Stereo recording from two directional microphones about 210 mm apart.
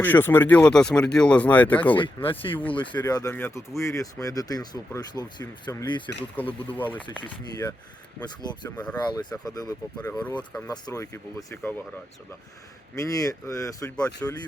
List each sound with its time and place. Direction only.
0.0 s speech: 10° left (ahead or behind)
2.0 s speech: 25° left (ahead or behind)
6.7 s speech: 10° left (ahead or behind)
7.2 s speech: 20° left (ahead or behind)
10.0 s speech: 5° left (ahead or behind)
13.0 s speech: 15° left (ahead or behind)